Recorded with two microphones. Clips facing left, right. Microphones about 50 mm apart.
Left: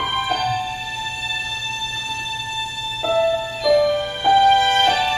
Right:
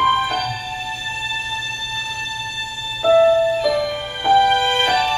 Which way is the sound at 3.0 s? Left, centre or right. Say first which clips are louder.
Right 6 dB; centre.